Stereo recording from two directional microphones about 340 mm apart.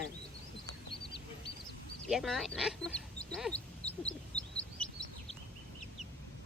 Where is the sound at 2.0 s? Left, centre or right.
Centre.